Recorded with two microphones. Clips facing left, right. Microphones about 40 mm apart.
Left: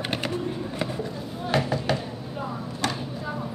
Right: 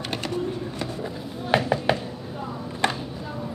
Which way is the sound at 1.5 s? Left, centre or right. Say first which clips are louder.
Right 3 dB; right.